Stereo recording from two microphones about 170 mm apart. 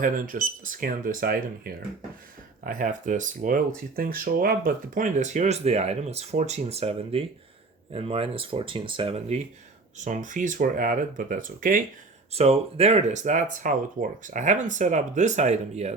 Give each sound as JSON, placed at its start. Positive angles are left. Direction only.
{"t": 0.0, "sound": "speech", "side_deg": -50}
{"t": 10.0, "sound": "speech", "side_deg": -45}
{"t": 12.3, "sound": "speech", "side_deg": -35}